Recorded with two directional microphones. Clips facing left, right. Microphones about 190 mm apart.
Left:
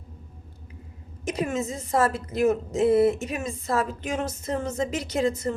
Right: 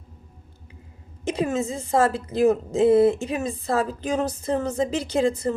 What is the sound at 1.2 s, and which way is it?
A woman's voice, 30° right (ahead or behind).